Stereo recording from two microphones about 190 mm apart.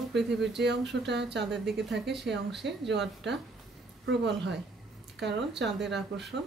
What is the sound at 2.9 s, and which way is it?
A woman's voice, 65° right (ahead or behind).